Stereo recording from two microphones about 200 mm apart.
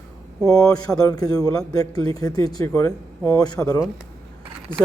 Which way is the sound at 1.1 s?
20° left (ahead or behind).